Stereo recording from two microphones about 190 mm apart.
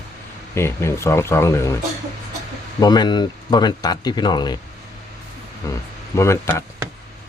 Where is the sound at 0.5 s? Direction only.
15° left (ahead or behind).